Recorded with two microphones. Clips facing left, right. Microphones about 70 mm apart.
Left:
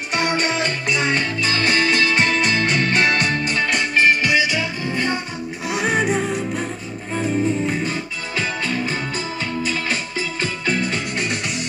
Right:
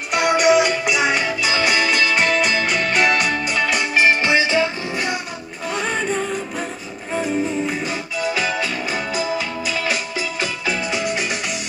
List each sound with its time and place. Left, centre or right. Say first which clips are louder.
0.1 s music: right 6 dB; centre
4.0 s music: right 1 dB; right
4.9 s music: left 1 dB; centre
5.7 s music: left 2 dB; centre
7.2 s music: left 1 dB; centre